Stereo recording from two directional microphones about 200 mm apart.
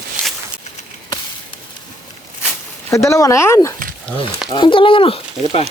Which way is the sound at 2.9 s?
15° left (ahead or behind).